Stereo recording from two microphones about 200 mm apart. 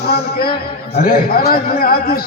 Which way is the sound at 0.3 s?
50° left (ahead or behind).